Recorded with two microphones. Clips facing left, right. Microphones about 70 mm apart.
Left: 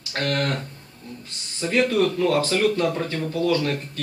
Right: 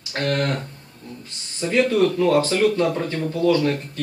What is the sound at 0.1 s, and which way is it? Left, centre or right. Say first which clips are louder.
Speech: right 2 dB; centre.